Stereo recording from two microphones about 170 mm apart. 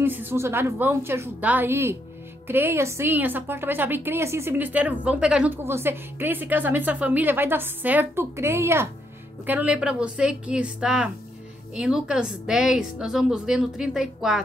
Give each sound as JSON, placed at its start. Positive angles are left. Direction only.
{"t": 0.0, "sound": "a woman's voice", "side_deg": -10}